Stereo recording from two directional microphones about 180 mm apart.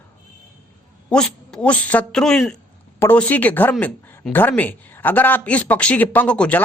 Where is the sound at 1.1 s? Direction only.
5° left (ahead or behind).